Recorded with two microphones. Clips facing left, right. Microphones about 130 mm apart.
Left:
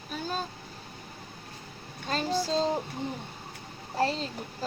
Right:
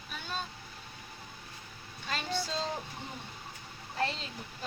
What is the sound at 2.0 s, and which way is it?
Speech, 35° left (ahead or behind).